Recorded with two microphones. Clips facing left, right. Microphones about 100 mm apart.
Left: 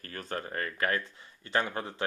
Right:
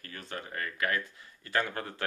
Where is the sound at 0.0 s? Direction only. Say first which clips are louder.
Left 4 dB; 40° left (ahead or behind).